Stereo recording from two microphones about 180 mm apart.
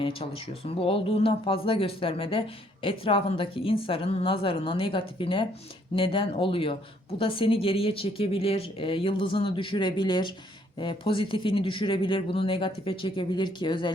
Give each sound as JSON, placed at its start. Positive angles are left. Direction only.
{"t": 0.0, "sound": "speech", "side_deg": 30}